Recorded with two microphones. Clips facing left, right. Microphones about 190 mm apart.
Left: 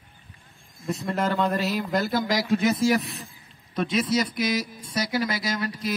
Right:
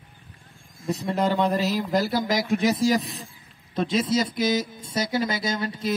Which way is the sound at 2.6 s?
35° right (ahead or behind).